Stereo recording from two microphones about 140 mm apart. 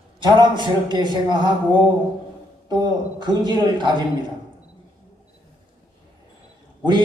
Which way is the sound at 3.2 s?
30° right (ahead or behind).